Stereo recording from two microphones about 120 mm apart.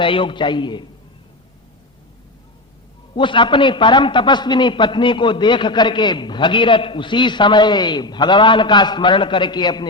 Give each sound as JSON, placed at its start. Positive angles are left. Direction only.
{"t": 0.0, "sound": "a man's voice", "side_deg": 45}
{"t": 3.2, "sound": "a man's voice", "side_deg": 45}